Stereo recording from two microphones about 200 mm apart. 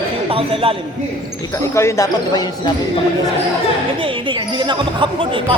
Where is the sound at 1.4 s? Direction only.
15° left (ahead or behind).